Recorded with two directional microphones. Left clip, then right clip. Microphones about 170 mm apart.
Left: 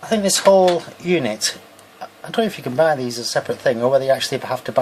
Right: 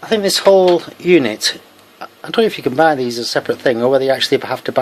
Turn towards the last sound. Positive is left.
turn(degrees=-45)  # may be behind; listen again after turning